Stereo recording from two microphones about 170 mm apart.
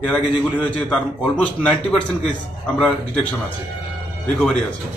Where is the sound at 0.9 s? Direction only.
5° left (ahead or behind).